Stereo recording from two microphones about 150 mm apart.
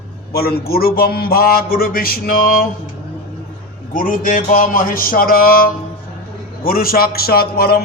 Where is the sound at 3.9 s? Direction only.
65° left (ahead or behind).